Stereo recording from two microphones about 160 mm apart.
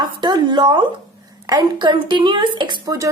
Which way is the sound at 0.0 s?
30° right (ahead or behind).